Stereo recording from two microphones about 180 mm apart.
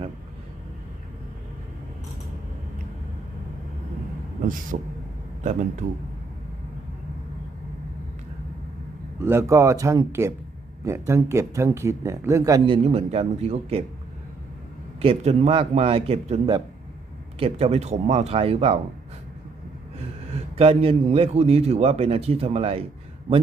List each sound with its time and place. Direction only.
4.4 s speech: 45° right (ahead or behind)
9.1 s speech: 15° right (ahead or behind)
12.6 s a man's voice: 30° right (ahead or behind)
15.0 s a man's voice: 35° right (ahead or behind)
17.4 s a man's voice: 35° right (ahead or behind)
20.3 s a man's voice: 30° right (ahead or behind)